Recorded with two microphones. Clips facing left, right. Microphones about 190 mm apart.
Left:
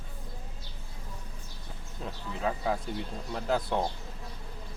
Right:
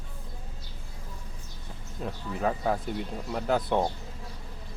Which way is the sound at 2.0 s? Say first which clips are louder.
Right 3 dB; 5° right (ahead or behind).